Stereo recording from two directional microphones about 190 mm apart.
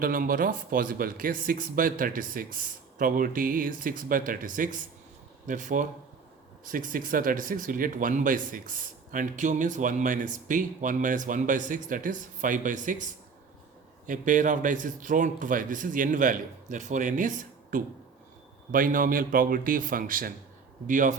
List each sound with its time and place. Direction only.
0.0 s speech: 50° right (ahead or behind)
14.1 s speech: 40° right (ahead or behind)